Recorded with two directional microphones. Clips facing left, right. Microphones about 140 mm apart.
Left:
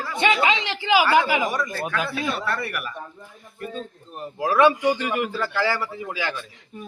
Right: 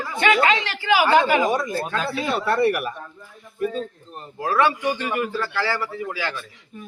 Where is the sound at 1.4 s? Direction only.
25° right (ahead or behind).